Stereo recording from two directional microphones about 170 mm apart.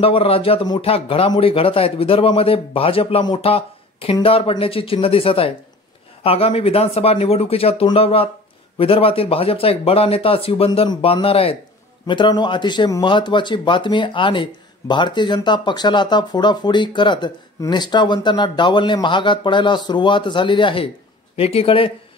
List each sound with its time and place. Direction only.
0.0 s speech: 35° left (ahead or behind)